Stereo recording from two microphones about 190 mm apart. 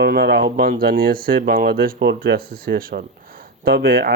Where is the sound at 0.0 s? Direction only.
60° right (ahead or behind).